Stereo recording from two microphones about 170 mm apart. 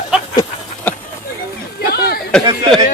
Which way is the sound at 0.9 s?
10° left (ahead or behind).